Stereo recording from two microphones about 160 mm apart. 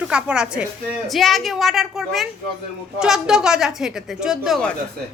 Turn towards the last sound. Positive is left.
turn(degrees=0)  # may be behind; listen again after turning